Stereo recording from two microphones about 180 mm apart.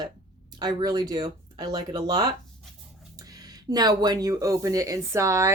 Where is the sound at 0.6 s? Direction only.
20° right (ahead or behind).